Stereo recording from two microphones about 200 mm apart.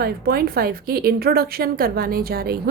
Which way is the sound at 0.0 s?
50° right (ahead or behind).